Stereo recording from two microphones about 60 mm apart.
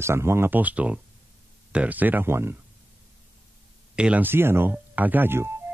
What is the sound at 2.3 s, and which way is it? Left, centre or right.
Speech, right.